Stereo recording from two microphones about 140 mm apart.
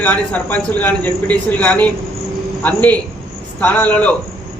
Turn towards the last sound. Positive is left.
turn(degrees=10)  # may be behind; listen again after turning